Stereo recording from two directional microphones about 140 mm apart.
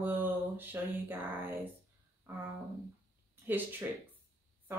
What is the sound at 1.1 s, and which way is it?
Speech, 15° right (ahead or behind).